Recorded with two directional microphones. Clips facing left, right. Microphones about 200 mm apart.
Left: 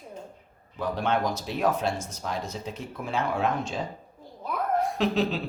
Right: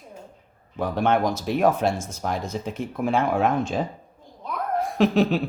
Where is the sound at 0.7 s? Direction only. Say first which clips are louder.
Right 5 dB; 50° right (ahead or behind).